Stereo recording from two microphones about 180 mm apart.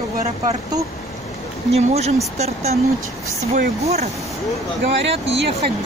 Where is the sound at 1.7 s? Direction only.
35° right (ahead or behind).